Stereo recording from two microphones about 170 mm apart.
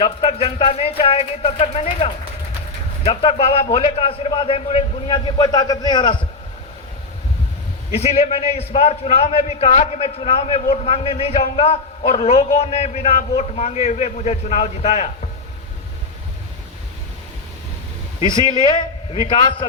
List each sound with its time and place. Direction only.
0.0 s a man's voice: 35° left (ahead or behind)
7.9 s a man's voice: 40° left (ahead or behind)
18.3 s a man's voice: 25° left (ahead or behind)